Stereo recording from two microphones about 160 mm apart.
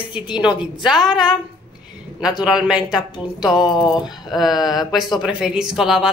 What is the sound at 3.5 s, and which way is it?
Speech, 30° left (ahead or behind).